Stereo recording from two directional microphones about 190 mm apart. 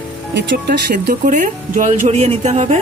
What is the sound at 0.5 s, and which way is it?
Speech, 55° right (ahead or behind).